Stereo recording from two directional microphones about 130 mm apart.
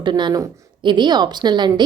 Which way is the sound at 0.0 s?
35° right (ahead or behind).